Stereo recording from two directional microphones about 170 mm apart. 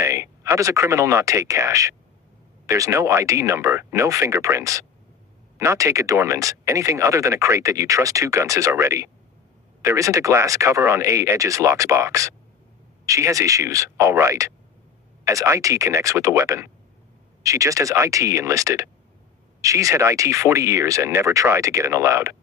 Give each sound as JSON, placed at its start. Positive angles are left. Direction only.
{"t": 0.0, "sound": "speech", "side_deg": -15}